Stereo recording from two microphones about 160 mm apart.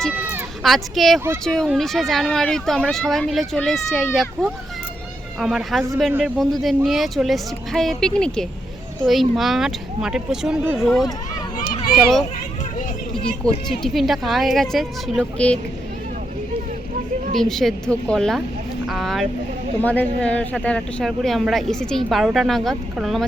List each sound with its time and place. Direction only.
0.1 s speech: 5° right (ahead or behind)
11.5 s a sound: 60° left (ahead or behind)
11.9 s speech: centre (ahead or behind)
13.4 s speech: centre (ahead or behind)
17.3 s speech: centre (ahead or behind)